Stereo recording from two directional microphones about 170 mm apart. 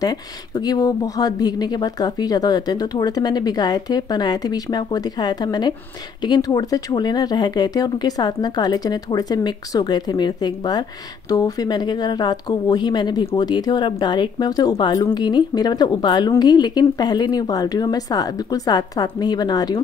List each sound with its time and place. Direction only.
0.7 s a woman's voice: 20° left (ahead or behind)